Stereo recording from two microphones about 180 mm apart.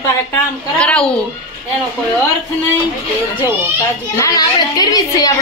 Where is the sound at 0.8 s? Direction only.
5° left (ahead or behind).